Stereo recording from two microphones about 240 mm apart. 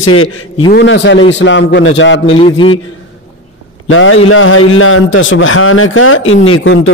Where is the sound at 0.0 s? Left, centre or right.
Left.